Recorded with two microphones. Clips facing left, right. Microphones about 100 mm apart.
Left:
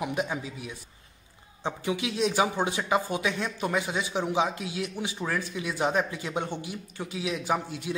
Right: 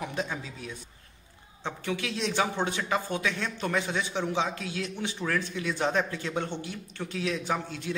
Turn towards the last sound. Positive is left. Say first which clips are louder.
# left 2 dB
turn(degrees=15)  # may be behind; listen again after turning